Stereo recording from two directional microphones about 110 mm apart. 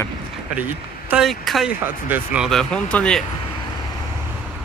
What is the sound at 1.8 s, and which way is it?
Speech, 15° right (ahead or behind).